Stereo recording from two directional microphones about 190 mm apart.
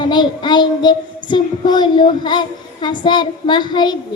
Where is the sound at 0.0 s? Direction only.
25° left (ahead or behind).